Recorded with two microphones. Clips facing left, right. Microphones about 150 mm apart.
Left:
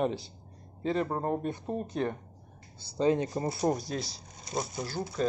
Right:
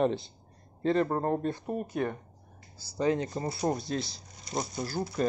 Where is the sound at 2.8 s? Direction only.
25° left (ahead or behind).